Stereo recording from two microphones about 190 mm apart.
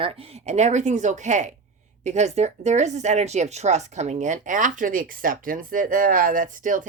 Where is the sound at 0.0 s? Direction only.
30° right (ahead or behind).